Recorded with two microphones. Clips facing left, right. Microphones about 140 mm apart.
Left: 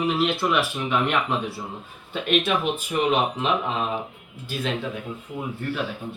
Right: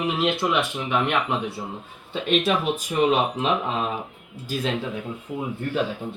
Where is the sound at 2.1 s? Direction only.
35° right (ahead or behind).